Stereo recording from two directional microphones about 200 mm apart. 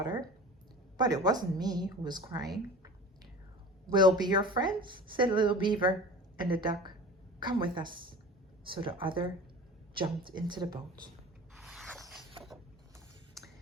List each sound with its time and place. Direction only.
0.0 s a woman's voice: 20° right (ahead or behind)
3.9 s a woman's voice: 20° right (ahead or behind)
11.5 s mechanisms: centre (ahead or behind)